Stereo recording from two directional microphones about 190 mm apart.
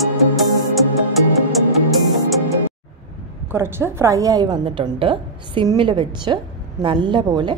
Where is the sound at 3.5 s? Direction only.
15° right (ahead or behind).